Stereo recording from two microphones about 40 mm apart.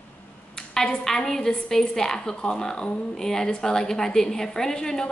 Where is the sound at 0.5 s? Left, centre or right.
Centre.